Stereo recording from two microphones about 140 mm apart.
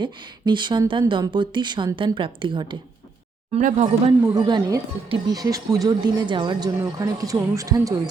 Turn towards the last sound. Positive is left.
turn(degrees=-25)  # may be behind; listen again after turning